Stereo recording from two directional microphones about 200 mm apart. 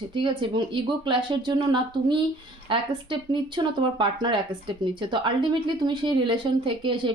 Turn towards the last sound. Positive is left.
turn(degrees=-25)  # may be behind; listen again after turning